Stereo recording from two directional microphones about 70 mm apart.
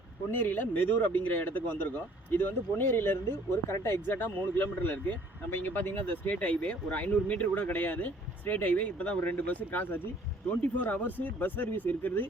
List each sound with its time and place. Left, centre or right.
0.3 s speech: left